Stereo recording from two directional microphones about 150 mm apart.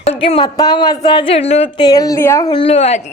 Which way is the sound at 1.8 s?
25° left (ahead or behind).